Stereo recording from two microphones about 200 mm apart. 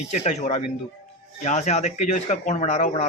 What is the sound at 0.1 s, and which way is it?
Speech, 35° left (ahead or behind).